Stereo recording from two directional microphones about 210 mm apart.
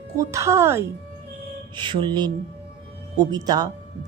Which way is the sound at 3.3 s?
15° right (ahead or behind).